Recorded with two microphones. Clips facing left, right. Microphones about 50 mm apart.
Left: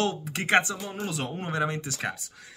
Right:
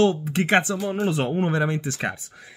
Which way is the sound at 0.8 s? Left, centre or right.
Right.